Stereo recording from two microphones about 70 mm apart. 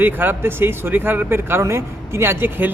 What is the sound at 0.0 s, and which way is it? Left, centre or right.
Speech, right.